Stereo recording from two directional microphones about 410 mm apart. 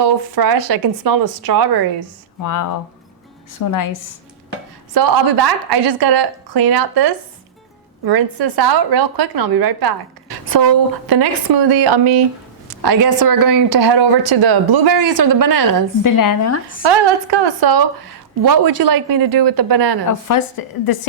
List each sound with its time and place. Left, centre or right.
0.0 s a woman's voice: right
2.4 s speech: left
4.9 s a woman's voice: right
11.0 s a woman's voice: right
12.8 s speech: right
13.9 s speech: right
16.0 s speech: left
16.8 s a woman's voice: right
20.1 s speech: left
20.8 s a woman's voice: left